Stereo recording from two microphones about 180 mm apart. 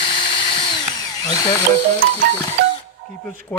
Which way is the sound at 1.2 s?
20° left (ahead or behind).